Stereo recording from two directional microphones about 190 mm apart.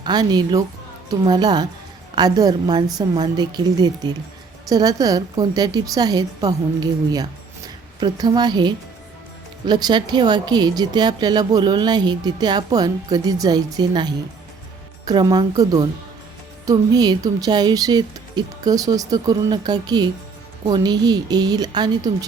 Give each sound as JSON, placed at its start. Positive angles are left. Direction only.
{"t": 0.0, "sound": "speech", "side_deg": -20}